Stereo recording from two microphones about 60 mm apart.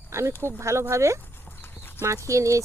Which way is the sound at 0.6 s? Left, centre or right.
Right.